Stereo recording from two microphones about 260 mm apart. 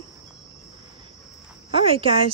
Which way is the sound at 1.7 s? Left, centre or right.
Right.